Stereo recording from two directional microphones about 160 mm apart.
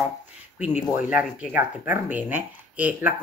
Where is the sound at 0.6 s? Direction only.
10° right (ahead or behind).